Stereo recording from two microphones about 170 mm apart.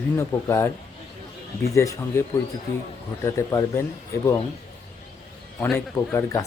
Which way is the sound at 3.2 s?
20° left (ahead or behind).